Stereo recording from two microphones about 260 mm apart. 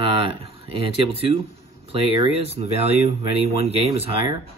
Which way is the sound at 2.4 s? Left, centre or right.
Right.